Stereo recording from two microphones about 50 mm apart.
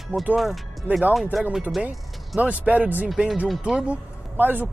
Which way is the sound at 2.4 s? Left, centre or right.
Right.